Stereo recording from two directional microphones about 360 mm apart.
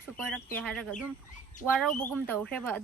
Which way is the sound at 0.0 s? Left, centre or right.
Centre.